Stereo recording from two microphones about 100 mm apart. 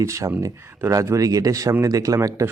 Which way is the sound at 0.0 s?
30° right (ahead or behind).